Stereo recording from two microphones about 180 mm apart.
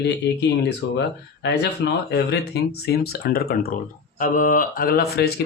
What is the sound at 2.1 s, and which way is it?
Speech, 65° left (ahead or behind).